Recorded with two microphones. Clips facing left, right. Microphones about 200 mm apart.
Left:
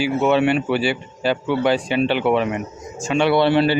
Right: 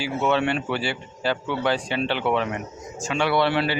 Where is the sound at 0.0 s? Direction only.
15° left (ahead or behind).